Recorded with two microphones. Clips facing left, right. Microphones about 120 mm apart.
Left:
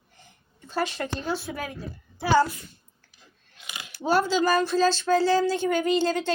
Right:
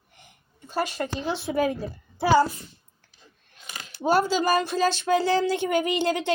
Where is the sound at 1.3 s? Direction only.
20° right (ahead or behind).